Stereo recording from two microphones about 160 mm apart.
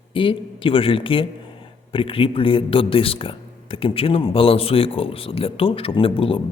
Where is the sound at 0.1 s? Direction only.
35° left (ahead or behind).